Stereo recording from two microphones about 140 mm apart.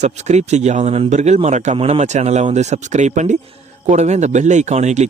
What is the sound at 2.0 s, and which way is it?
Speech, 55° right (ahead or behind).